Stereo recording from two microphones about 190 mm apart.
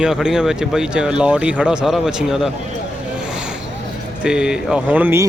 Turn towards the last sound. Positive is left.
turn(degrees=-10)  # may be behind; listen again after turning